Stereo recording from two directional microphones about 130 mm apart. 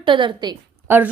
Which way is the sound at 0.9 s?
15° right (ahead or behind).